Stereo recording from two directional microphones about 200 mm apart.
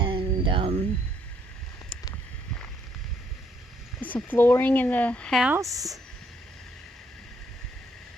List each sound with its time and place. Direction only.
0.0 s a sound: 25° right (ahead or behind)
4.0 s speech: 10° left (ahead or behind)
5.5 s speech: 15° right (ahead or behind)